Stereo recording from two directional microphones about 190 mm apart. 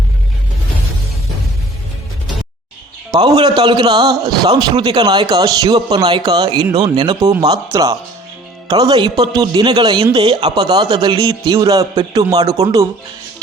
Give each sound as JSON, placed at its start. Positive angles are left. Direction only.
{"t": 3.1, "sound": "a man's voice", "side_deg": -20}